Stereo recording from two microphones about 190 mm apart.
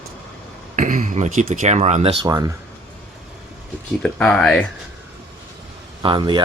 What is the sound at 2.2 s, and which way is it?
Speech, 20° right (ahead or behind).